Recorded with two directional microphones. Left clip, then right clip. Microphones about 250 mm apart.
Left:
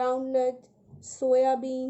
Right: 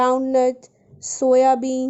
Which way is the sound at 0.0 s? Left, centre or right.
Right.